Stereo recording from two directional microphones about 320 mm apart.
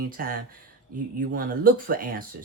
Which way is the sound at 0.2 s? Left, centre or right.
Right.